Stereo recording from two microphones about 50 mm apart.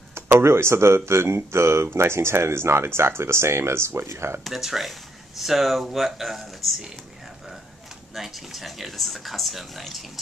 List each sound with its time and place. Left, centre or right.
0.1 s speech: right
4.5 s speech: centre
8.1 s speech: centre